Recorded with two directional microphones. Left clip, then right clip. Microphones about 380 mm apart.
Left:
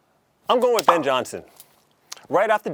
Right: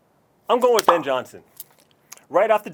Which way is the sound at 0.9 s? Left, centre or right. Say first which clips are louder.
Left 1 dB; left.